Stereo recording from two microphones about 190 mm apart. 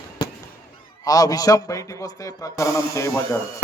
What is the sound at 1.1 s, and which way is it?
A man's voice, 20° left (ahead or behind).